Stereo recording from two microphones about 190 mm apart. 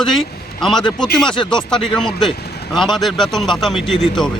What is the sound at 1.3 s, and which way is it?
Speech, 25° left (ahead or behind).